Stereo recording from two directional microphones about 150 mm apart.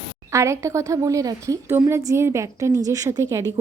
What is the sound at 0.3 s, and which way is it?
Speech, 20° right (ahead or behind).